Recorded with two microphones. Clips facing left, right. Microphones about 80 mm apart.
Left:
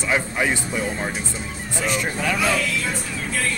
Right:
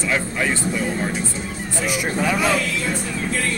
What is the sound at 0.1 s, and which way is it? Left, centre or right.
Speech, centre.